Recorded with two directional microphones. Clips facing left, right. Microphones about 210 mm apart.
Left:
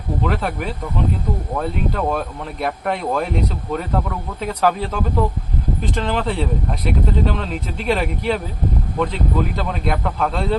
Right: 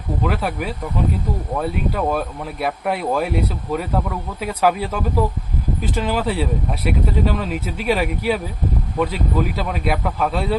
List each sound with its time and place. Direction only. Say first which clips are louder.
0.2 s speech: even; 5° right (ahead or behind)